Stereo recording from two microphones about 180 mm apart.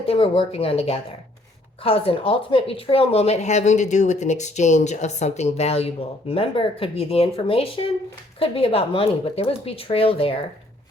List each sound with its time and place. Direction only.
0.0 s a woman's voice: 30° left (ahead or behind)